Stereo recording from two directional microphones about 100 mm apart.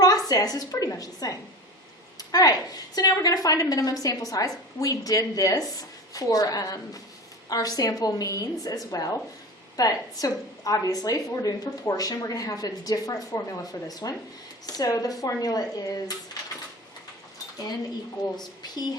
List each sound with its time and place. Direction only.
0.0 s a woman's voice: 40° left (ahead or behind)